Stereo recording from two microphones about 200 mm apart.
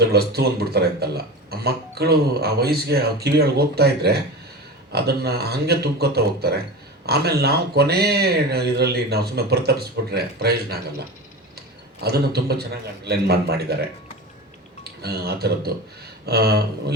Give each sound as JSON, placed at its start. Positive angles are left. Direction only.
{"t": 0.0, "sound": "speech", "side_deg": -55}
{"t": 15.0, "sound": "speech", "side_deg": -50}